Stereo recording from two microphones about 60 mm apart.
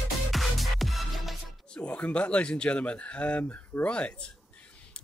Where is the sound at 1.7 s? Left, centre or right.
Centre.